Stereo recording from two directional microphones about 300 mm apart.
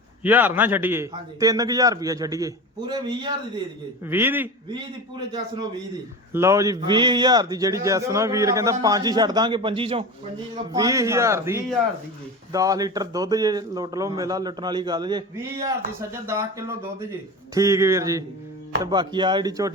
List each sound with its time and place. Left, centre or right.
0.2 s a man's voice: centre
6.3 s a man's voice: centre